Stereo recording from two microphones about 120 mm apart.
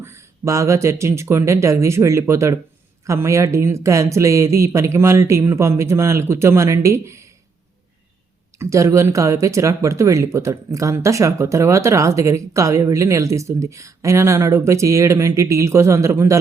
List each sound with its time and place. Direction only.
0.0 s speech: 20° right (ahead or behind)
8.5 s speech: 25° right (ahead or behind)